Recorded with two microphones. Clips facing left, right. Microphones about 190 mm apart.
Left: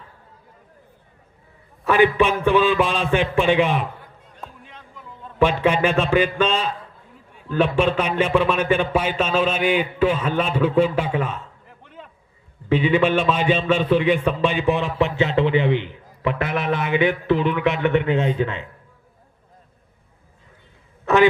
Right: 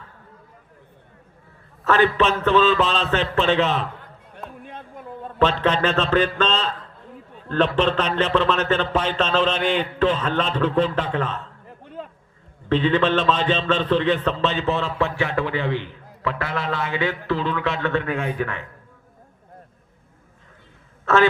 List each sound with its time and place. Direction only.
1.8 s a man's voice: 15° left (ahead or behind)
4.4 s a sound: 55° right (ahead or behind)
5.4 s a man's voice: 10° left (ahead or behind)
12.6 s a man's voice: 10° left (ahead or behind)
21.0 s speech: 15° left (ahead or behind)